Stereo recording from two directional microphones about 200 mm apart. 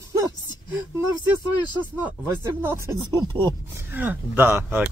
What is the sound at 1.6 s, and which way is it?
Speech, 10° right (ahead or behind).